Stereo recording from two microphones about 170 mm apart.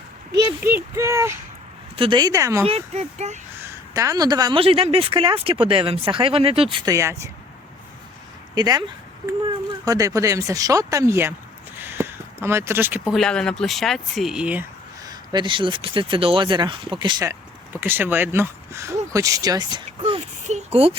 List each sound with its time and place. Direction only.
0.3 s a sound: 75° right (ahead or behind)
0.9 s speech: 15° right (ahead or behind)
2.0 s speech: 25° right (ahead or behind)
2.6 s a woman's voice: 35° right (ahead or behind)
3.6 s a woman's voice: 15° right (ahead or behind)
8.5 s speech: 25° right (ahead or behind)
9.8 s speech: 20° right (ahead or behind)
11.8 s a sound: 15° right (ahead or behind)
13.1 s speech: 5° left (ahead or behind)
15.0 s speech: 25° right (ahead or behind)
17.7 s a woman's voice: 10° right (ahead or behind); by 21.0 s 35° right (ahead or behind)